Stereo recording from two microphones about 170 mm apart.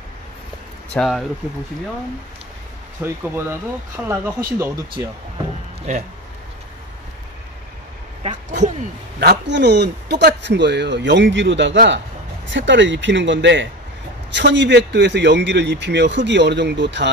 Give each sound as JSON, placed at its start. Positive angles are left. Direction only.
{"t": 0.9, "sound": "speech", "side_deg": 0}
{"t": 3.0, "sound": "speech", "side_deg": -15}
{"t": 5.8, "sound": "a sound", "side_deg": -45}
{"t": 9.2, "sound": "a man's voice", "side_deg": -85}